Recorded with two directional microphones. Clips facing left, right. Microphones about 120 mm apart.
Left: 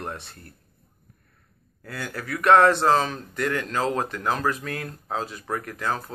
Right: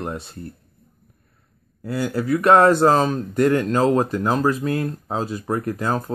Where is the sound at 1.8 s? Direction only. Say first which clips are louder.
Right 10 dB; 25° right (ahead or behind).